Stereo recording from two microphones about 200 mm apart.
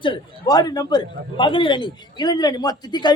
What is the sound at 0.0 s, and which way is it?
A man's voice, 20° left (ahead or behind).